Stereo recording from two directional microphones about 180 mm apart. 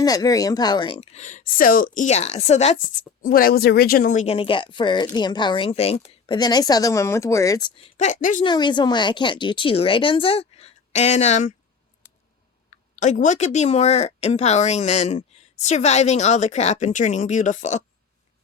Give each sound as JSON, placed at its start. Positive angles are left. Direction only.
{"t": 0.0, "sound": "speech", "side_deg": 20}
{"t": 3.2, "sound": "speech", "side_deg": 55}
{"t": 7.8, "sound": "speech", "side_deg": 35}
{"t": 8.4, "sound": "speech", "side_deg": 25}
{"t": 13.0, "sound": "speech", "side_deg": 40}